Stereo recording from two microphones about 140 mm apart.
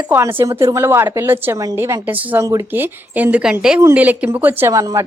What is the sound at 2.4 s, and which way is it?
A woman's voice, 20° right (ahead or behind).